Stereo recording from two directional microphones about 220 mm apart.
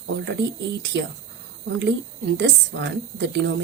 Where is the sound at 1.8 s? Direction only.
55° right (ahead or behind).